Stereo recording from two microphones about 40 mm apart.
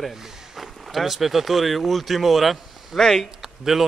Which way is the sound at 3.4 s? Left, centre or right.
Centre.